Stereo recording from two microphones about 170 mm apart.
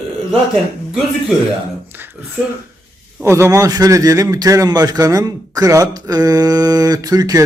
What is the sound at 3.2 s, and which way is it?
A man's voice, 15° right (ahead or behind).